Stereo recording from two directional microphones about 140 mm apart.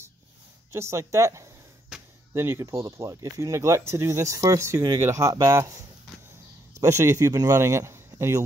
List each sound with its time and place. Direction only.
0.7 s speech: 20° right (ahead or behind)